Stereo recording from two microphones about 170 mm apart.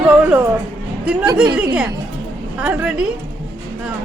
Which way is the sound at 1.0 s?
5° right (ahead or behind).